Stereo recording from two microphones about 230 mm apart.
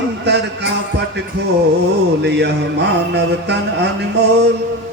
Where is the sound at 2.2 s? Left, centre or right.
Right.